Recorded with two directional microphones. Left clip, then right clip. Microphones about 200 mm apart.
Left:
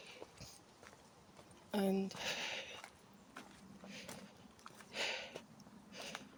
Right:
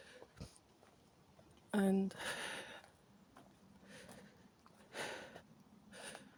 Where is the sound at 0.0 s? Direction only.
50° right (ahead or behind).